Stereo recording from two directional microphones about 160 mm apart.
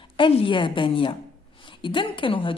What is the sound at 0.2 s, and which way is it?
A woman's voice, 30° left (ahead or behind).